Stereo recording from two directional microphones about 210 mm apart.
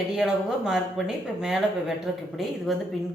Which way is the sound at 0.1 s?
5° right (ahead or behind).